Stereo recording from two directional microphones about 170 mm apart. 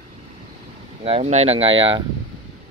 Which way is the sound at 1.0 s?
40° right (ahead or behind).